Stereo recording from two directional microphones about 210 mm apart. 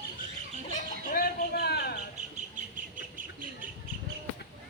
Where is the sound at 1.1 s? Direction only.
45° left (ahead or behind).